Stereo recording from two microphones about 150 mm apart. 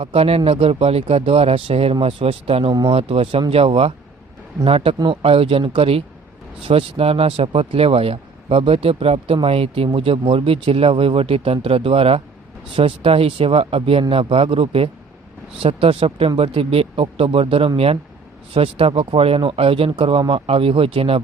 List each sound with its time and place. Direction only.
0.0 s speech: 40° right (ahead or behind)
2.7 s speech: 25° right (ahead or behind)
3.0 s speech: 40° right (ahead or behind)